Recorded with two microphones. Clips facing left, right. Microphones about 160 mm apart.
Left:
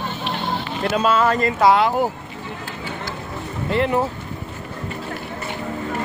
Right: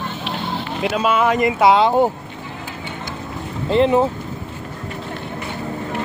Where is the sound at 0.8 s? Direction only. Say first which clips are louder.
Even; 5° right (ahead or behind); by 2.1 s 25° right (ahead or behind).